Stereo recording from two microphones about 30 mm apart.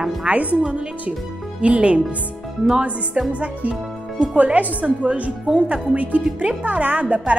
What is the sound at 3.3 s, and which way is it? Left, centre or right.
Speech, right.